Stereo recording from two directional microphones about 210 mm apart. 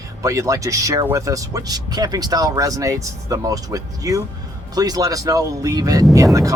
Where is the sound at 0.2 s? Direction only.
15° right (ahead or behind).